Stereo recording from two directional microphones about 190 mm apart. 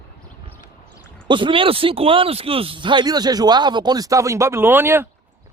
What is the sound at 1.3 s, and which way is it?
Speech, 25° right (ahead or behind).